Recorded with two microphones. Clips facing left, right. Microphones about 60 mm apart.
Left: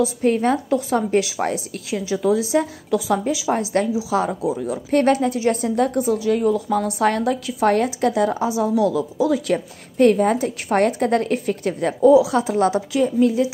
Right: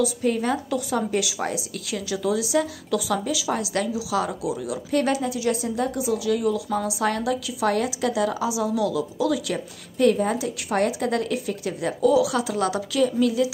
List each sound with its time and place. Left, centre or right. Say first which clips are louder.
0.2 s a woman's voice: left 5 dB; left
12.0 s a woman's voice: left 6 dB; left